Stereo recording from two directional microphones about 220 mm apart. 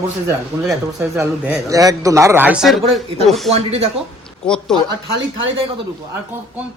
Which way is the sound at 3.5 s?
30° right (ahead or behind).